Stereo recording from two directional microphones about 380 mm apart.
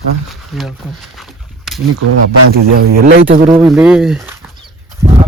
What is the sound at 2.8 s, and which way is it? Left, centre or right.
Speech, right.